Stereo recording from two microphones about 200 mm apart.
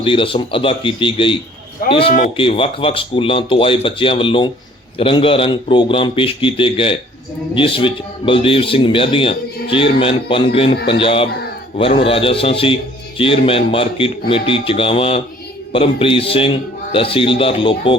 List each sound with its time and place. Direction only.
0.0 s a man's voice: 25° left (ahead or behind)